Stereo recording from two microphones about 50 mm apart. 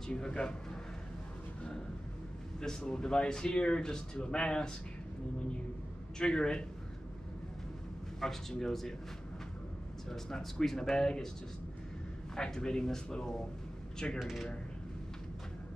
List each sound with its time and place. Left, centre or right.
0.1 s speech: centre
2.6 s speech: centre
6.1 s speech: centre
8.2 s speech: centre
10.0 s speech: centre
12.4 s speech: centre